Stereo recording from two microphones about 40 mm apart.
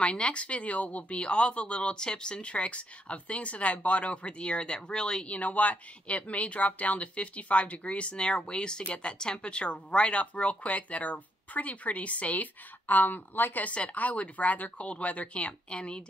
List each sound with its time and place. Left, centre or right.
0.0 s speech: left
5.3 s speech: left
12.8 s a woman's voice: left
13.7 s speech: left